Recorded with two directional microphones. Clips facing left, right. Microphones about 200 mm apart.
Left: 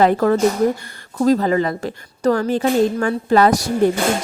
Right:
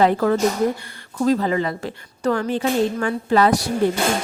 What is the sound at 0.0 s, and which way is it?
Speech, 45° left (ahead or behind).